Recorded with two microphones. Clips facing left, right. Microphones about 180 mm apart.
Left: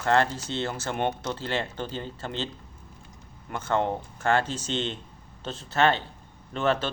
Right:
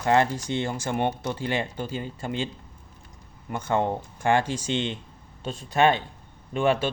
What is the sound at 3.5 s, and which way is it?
Speech, 15° right (ahead or behind).